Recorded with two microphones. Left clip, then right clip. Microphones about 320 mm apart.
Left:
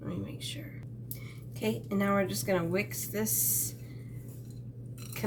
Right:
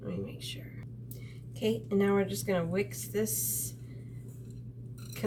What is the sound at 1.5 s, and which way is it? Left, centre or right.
A woman's voice, centre.